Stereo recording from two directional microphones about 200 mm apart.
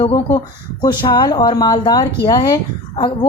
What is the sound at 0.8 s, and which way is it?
A woman's voice, 20° left (ahead or behind).